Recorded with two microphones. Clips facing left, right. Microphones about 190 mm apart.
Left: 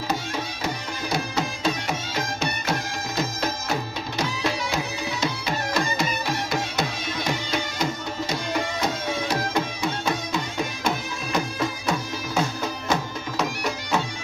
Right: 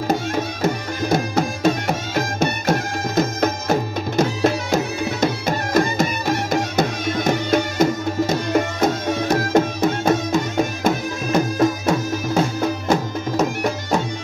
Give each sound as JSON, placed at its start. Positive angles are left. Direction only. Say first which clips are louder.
{"t": 0.1, "sound": "music", "louder": "right 8 dB", "side_deg": -50}